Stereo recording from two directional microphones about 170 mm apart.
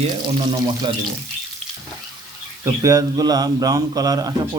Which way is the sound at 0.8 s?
25° right (ahead or behind).